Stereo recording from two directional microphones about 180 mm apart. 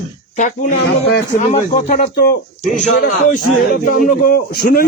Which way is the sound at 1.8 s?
50° left (ahead or behind).